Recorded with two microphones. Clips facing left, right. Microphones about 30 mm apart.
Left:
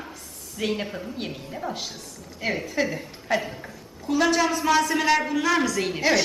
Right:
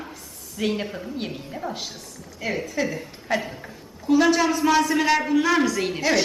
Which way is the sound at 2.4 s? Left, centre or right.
Left.